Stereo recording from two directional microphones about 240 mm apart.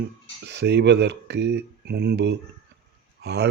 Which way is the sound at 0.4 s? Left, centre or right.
Right.